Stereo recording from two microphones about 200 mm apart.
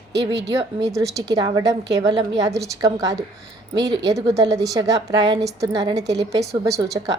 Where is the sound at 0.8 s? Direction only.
15° right (ahead or behind).